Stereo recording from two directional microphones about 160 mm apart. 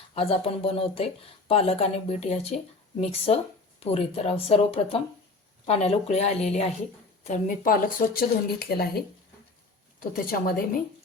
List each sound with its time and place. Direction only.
0.1 s speech: 35° left (ahead or behind)
7.3 s speech: 60° left (ahead or behind); by 9.0 s 80° left
10.0 s speech: 65° left (ahead or behind)